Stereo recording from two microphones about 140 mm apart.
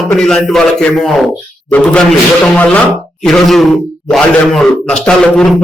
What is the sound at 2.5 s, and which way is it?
Speech, 10° left (ahead or behind).